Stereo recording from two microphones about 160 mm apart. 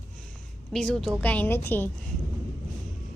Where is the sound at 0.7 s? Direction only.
5° left (ahead or behind).